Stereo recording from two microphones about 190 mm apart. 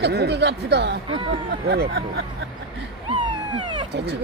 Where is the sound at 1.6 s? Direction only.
55° right (ahead or behind).